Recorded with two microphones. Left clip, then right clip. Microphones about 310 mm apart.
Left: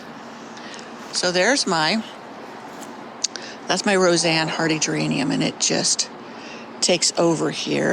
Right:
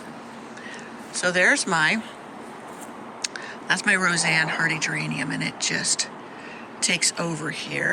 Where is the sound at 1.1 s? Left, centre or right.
Centre.